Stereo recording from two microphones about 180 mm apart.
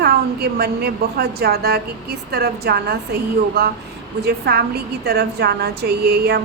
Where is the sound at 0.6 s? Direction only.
65° right (ahead or behind).